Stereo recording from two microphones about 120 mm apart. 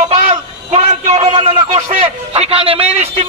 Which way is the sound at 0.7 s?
70° right (ahead or behind).